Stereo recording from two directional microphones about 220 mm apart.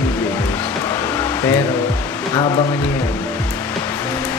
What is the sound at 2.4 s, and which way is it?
Speech, 20° left (ahead or behind).